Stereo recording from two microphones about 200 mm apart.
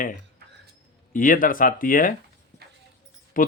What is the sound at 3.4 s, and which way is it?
Speech, 45° left (ahead or behind).